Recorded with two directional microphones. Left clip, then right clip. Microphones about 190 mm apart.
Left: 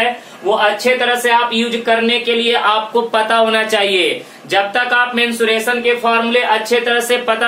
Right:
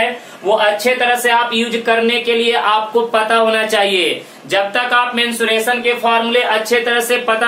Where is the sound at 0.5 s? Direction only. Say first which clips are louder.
Even; 15° left (ahead or behind).